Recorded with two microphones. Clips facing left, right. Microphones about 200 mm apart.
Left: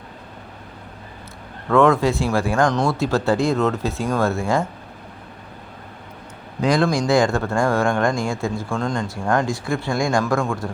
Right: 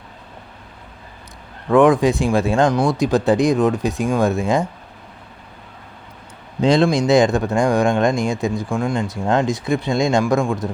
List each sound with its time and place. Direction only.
1.7 s speech: 15° right (ahead or behind)
6.6 s speech: 25° right (ahead or behind)